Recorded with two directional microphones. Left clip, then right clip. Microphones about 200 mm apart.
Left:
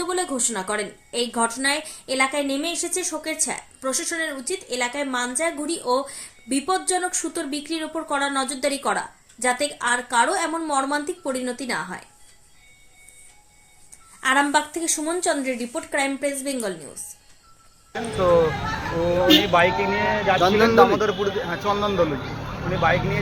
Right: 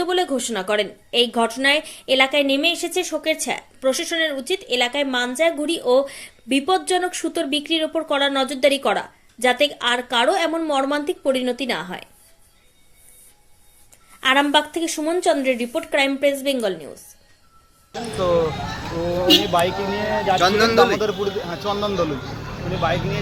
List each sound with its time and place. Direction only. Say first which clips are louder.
0.0 s a woman's voice: right 4 dB; centre (ahead or behind)
14.2 s a woman's voice: right 3 dB; centre (ahead or behind)
20.4 s speech: even; 15° left (ahead or behind)
21.0 s a woman's voice: even; 5° right (ahead or behind)